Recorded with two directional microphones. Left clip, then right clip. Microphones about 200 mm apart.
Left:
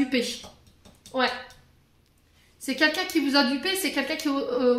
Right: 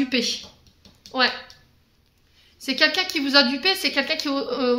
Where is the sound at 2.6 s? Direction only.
30° right (ahead or behind).